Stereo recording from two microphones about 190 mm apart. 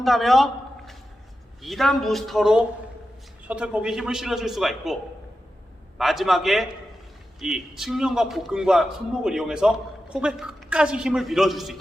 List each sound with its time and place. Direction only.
0.0 s a sound: centre (ahead or behind)
1.6 s a man's voice: centre (ahead or behind)
6.0 s a man's voice: centre (ahead or behind)